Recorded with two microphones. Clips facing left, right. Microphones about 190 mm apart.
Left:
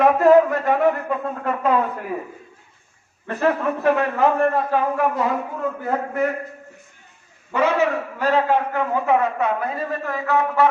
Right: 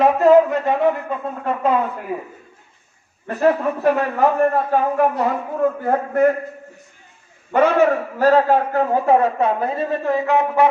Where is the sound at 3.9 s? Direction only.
40° right (ahead or behind).